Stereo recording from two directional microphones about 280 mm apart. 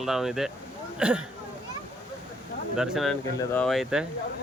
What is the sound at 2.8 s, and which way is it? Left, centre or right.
Speech, centre.